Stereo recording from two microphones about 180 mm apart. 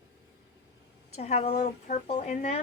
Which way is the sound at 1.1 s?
35° left (ahead or behind).